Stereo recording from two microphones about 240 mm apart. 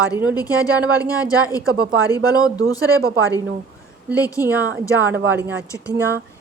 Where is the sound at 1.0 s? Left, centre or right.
Centre.